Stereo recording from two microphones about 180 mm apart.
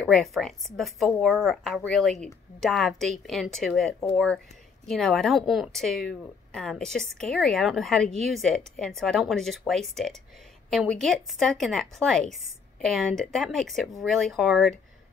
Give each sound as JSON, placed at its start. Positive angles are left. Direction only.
{"t": 0.1, "sound": "speech", "side_deg": 0}